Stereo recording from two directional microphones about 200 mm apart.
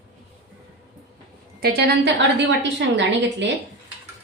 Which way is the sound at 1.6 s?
50° right (ahead or behind).